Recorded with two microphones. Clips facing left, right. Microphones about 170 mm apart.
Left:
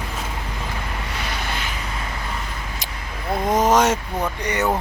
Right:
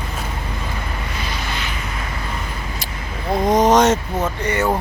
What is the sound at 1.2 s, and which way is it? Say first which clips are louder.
Waves: even; 65° left (ahead or behind).